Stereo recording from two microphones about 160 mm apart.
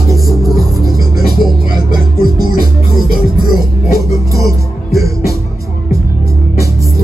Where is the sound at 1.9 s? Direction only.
25° right (ahead or behind).